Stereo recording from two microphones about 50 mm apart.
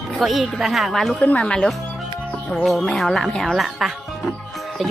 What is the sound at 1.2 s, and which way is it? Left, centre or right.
Speech, left.